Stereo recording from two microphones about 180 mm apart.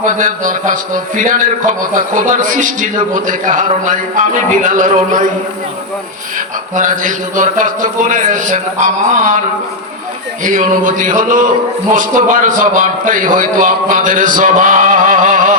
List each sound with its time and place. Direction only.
0.0 s a man's voice: 45° right (ahead or behind)
6.7 s a man's voice: 45° right (ahead or behind)
10.4 s a man's voice: 45° right (ahead or behind)